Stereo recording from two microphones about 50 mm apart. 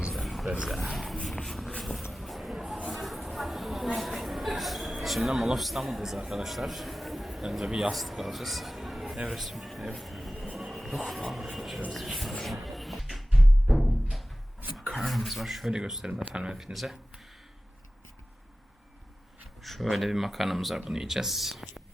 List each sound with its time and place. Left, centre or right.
0.1 s a sound: centre
1.8 s vehicle: centre
2.1 s a sound: centre
7.7 s a man's voice: centre
10.4 s a sound: centre
11.5 s speech: centre
12.3 s music: centre
14.9 s speech: centre
16.7 s speech: centre
19.6 s speech: centre